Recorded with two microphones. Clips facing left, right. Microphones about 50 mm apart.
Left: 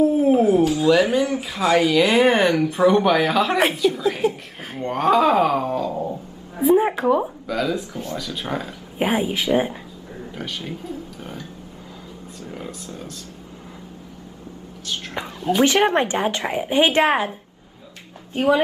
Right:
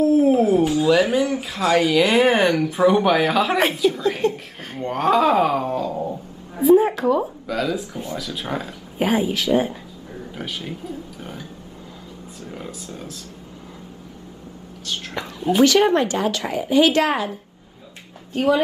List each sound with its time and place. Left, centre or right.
0.0 s dog: centre
0.7 s speech: centre
6.7 s a woman's voice: centre
7.4 s speech: centre
8.9 s speech: centre
10.3 s speech: centre
12.4 s speech: centre
15.2 s a woman's voice: left
18.3 s a woman's voice: centre